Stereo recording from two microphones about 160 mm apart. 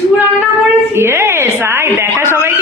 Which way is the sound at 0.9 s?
15° right (ahead or behind).